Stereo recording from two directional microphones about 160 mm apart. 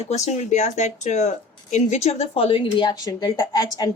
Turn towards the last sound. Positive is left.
turn(degrees=25)  # may be behind; listen again after turning